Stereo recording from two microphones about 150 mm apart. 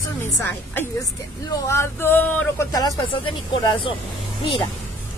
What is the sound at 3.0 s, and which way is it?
A woman's voice, 35° left (ahead or behind).